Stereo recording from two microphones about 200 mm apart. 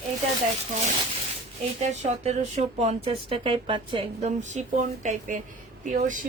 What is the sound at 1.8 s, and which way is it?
Speech, 35° right (ahead or behind).